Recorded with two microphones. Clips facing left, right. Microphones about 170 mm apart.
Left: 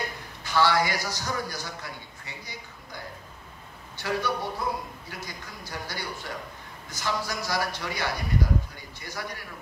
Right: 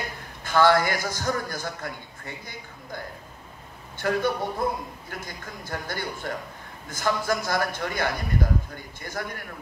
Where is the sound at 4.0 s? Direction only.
50° right (ahead or behind).